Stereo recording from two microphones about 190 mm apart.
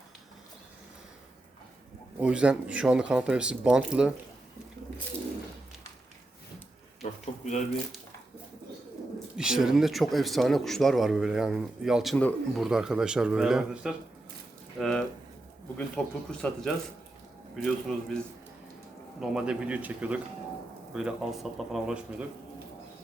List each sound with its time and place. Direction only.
2.2 s a man's voice: 5° right (ahead or behind)
7.0 s a sound: 40° left (ahead or behind)
9.4 s a man's voice: 5° right (ahead or behind)
19.2 s a man's voice: 5° right (ahead or behind)